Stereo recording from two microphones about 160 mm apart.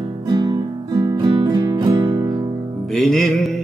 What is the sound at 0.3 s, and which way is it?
Music, 30° right (ahead or behind).